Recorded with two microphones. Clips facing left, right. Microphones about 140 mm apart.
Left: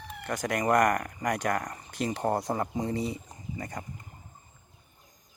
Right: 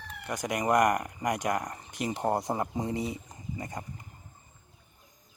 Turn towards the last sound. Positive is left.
turn(degrees=-20)  # may be behind; listen again after turning